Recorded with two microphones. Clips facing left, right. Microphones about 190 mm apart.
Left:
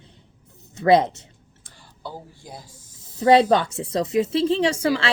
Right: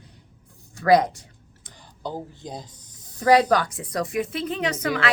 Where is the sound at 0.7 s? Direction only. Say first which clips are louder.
Left 1 dB; 25° left (ahead or behind).